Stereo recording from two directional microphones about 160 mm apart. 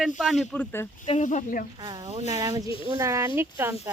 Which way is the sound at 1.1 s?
50° left (ahead or behind).